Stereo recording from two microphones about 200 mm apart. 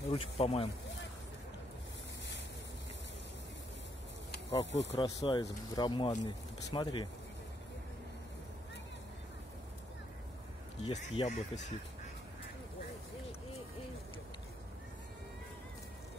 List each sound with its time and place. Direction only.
0.1 s speech: 30° left (ahead or behind)
4.5 s speech: 60° left (ahead or behind)
4.9 s speech: 20° left (ahead or behind)
10.8 s speech: 30° left (ahead or behind)